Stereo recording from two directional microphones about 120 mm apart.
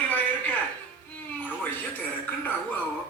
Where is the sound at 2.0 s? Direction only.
15° left (ahead or behind).